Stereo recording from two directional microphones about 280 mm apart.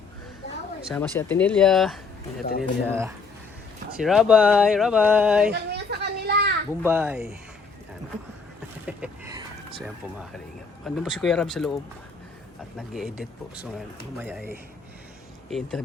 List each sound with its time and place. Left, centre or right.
0.9 s speech: centre
5.5 s a sound: right
6.8 s speech: centre
8.9 s a sound: centre
9.8 s speech: centre
12.9 s speech: centre